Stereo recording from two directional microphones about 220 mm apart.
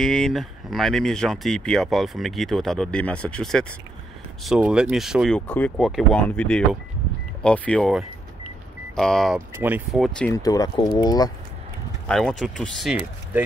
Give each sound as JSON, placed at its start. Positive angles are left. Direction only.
{"t": 0.0, "sound": "speech", "side_deg": 0}
{"t": 10.3, "sound": "speech", "side_deg": 15}
{"t": 12.1, "sound": "speech", "side_deg": 0}